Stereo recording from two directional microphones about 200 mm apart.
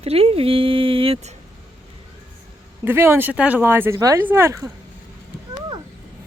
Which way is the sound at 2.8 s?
10° right (ahead or behind).